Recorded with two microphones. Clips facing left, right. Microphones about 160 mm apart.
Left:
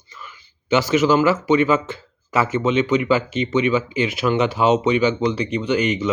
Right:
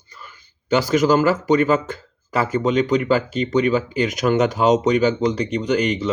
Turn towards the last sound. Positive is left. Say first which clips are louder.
# even
turn(degrees=-35)  # may be behind; listen again after turning